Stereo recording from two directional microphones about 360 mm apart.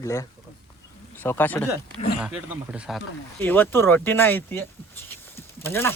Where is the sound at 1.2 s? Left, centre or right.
Centre.